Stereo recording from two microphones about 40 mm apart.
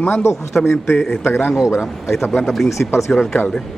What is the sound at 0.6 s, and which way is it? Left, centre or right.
Speech, centre.